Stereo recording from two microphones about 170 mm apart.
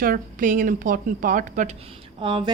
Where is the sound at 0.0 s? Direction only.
55° right (ahead or behind).